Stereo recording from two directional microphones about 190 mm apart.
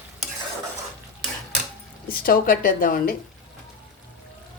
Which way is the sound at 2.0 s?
50° left (ahead or behind).